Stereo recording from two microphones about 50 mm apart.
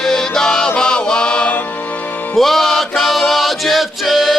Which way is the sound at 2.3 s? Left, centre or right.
Centre.